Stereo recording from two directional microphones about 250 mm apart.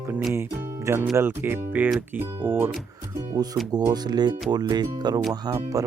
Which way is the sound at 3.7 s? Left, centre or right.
Centre.